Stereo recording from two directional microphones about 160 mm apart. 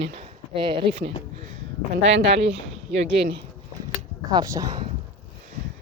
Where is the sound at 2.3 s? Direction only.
40° right (ahead or behind).